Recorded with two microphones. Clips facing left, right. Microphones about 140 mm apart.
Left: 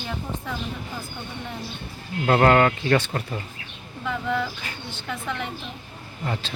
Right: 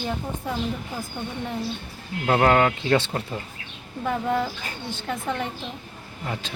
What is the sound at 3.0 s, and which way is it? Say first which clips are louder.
Speech: even; 20° right (ahead or behind).